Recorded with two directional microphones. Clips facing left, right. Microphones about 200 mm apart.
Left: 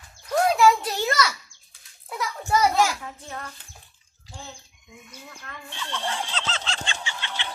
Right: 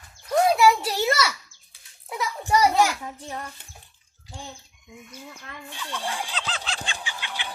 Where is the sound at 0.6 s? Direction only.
5° right (ahead or behind).